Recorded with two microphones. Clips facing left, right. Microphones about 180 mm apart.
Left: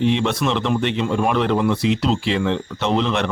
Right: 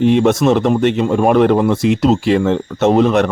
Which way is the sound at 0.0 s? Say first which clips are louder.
Right 7 dB; 50° right (ahead or behind).